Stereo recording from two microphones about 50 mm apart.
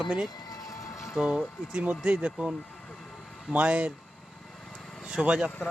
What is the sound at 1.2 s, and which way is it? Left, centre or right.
Speech, right.